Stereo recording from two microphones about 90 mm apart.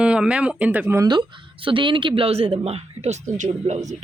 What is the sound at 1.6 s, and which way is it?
A man's voice, 65° right (ahead or behind).